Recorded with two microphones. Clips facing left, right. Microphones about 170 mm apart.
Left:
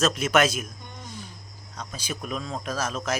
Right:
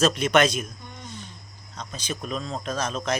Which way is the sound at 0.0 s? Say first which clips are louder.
Right 2 dB; centre (ahead or behind).